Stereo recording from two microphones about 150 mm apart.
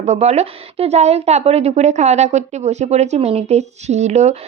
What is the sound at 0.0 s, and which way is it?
A woman's voice, 45° right (ahead or behind).